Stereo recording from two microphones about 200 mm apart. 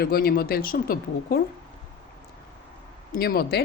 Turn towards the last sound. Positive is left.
turn(degrees=50)  # may be behind; listen again after turning